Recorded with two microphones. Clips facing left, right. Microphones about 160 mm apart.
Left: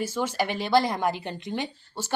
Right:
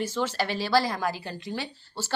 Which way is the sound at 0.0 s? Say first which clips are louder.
Left 1 dB; 10° left (ahead or behind).